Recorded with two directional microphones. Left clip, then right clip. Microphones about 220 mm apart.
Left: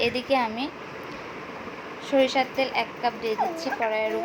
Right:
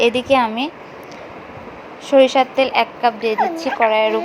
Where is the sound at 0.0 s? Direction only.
25° right (ahead or behind).